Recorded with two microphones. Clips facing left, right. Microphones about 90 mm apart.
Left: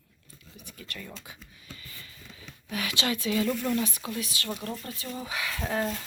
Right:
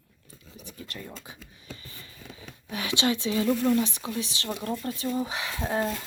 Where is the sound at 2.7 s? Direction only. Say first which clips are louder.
Right 3 dB; 25° right (ahead or behind).